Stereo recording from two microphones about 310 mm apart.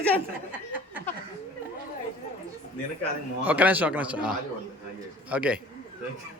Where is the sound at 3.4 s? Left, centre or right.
Centre.